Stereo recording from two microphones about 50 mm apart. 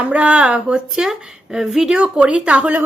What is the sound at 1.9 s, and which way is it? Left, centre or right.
Speech, right.